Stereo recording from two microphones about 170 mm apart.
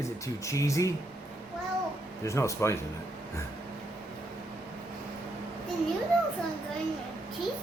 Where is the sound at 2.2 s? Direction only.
15° left (ahead or behind).